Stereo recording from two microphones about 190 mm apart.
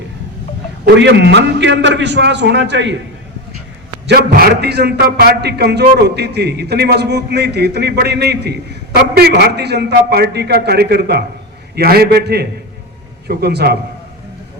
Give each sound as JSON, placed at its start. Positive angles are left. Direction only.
{"t": 0.9, "sound": "a man's voice", "side_deg": -65}
{"t": 4.0, "sound": "a man's voice", "side_deg": -55}